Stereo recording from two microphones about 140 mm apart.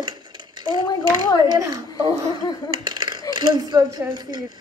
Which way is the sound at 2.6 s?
35° right (ahead or behind).